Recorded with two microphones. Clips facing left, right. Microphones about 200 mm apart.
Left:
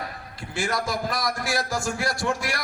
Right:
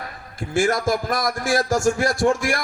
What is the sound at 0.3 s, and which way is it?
A man's voice, 50° right (ahead or behind).